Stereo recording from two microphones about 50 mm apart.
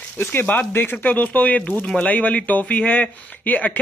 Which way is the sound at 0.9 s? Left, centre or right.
Left.